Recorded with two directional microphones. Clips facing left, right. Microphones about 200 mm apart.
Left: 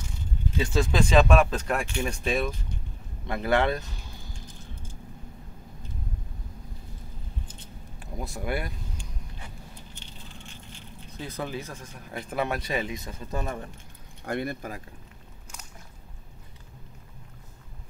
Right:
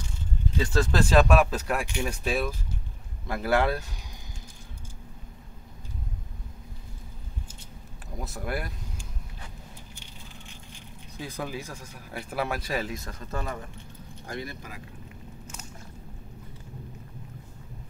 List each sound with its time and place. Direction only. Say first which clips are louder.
0.7 s speech: even; 5° right (ahead or behind)
8.2 s speech: left 2 dB; centre (ahead or behind)
11.1 s speech: left 1 dB; 10° right (ahead or behind)
13.3 s speech: left 2 dB; 20° left (ahead or behind)
14.2 s speech: left 7 dB; 60° left (ahead or behind)